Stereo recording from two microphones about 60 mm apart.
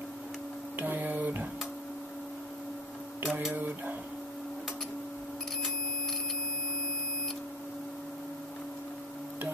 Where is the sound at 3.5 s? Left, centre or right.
Right.